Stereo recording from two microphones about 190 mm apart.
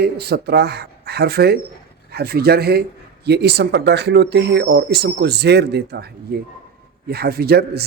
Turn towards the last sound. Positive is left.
turn(degrees=-55)  # may be behind; listen again after turning